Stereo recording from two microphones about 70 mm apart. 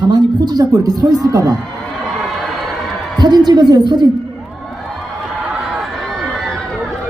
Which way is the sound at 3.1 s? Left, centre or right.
Right.